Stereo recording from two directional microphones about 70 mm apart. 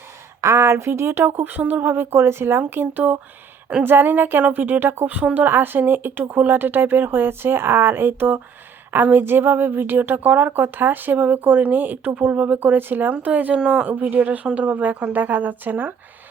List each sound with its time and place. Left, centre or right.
0.4 s a woman's voice: right